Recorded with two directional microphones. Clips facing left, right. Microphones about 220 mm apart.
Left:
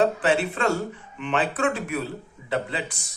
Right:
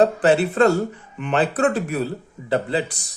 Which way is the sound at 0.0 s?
40° right (ahead or behind).